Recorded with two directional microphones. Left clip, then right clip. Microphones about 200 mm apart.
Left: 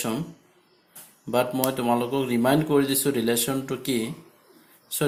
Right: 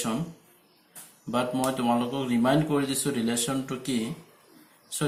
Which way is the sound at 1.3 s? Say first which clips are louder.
Left 3 dB; 35° left (ahead or behind).